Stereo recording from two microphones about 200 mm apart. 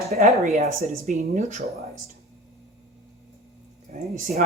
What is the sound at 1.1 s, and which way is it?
Speech, 40° right (ahead or behind).